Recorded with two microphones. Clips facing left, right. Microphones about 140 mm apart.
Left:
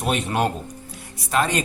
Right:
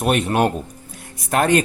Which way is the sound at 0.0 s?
60° right (ahead or behind).